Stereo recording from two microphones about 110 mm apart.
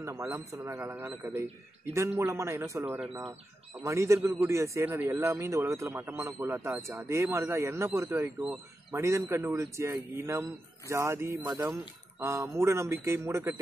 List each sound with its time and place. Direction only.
0.0 s a man's voice: 20° right (ahead or behind)